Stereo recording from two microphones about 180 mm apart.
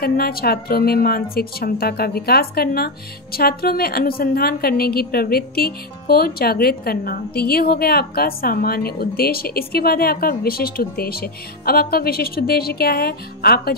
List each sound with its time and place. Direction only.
0.0 s a woman's voice: 55° left (ahead or behind)